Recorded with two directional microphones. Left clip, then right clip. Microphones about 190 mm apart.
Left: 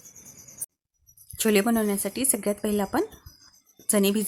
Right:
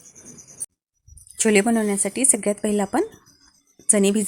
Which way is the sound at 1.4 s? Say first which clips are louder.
Right 4 dB; 10° right (ahead or behind).